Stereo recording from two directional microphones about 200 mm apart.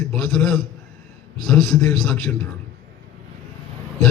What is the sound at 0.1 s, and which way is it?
A man's voice, 5° left (ahead or behind).